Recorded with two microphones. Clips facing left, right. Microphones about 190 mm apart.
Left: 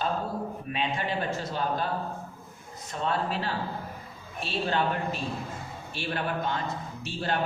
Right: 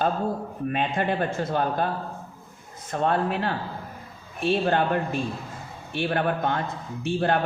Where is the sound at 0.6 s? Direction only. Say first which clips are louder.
Right 8 dB; 55° right (ahead or behind).